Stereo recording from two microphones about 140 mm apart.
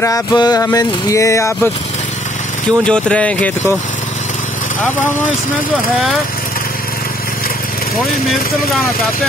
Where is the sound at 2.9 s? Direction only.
5° left (ahead or behind).